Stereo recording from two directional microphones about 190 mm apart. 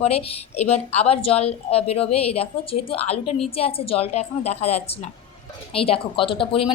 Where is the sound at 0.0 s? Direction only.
35° left (ahead or behind).